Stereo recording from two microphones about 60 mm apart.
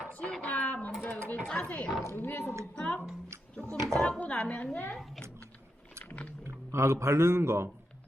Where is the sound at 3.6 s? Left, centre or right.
Right.